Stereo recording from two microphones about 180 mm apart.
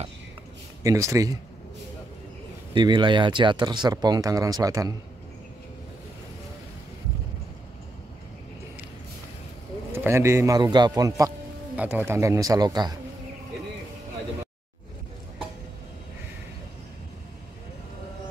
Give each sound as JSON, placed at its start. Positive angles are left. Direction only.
{"t": 0.8, "sound": "speech", "side_deg": -15}
{"t": 2.7, "sound": "speech", "side_deg": -25}
{"t": 9.9, "sound": "speech", "side_deg": -15}
{"t": 11.7, "sound": "speech", "side_deg": -10}